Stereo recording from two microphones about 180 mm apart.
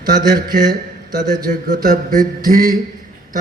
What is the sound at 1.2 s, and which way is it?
A man's voice, 45° right (ahead or behind).